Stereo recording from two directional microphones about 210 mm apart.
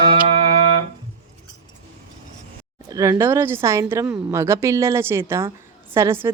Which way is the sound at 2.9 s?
15° right (ahead or behind).